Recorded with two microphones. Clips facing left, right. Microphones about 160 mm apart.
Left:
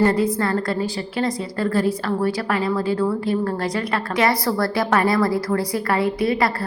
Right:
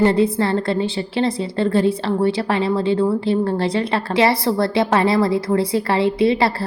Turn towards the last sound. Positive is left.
turn(degrees=-25)  # may be behind; listen again after turning